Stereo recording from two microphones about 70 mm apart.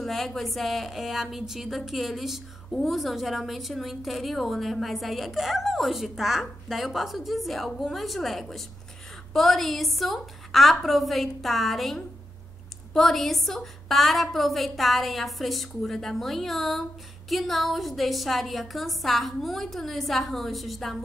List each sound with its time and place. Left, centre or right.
0.0 s a woman's voice: centre